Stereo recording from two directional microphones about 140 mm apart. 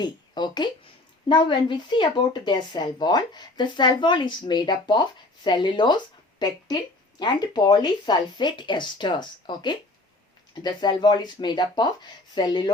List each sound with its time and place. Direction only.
0.0 s a woman's voice: 30° left (ahead or behind)